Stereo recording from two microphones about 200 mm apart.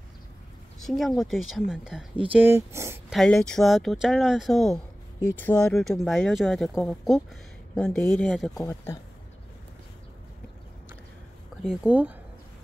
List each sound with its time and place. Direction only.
0.8 s speech: centre (ahead or behind)
3.1 s speech: centre (ahead or behind)
8.5 s speech: 15° left (ahead or behind)
11.6 s speech: 5° right (ahead or behind)